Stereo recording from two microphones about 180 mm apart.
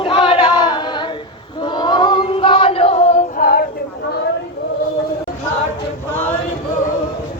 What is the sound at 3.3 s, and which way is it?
Female singing, 50° left (ahead or behind).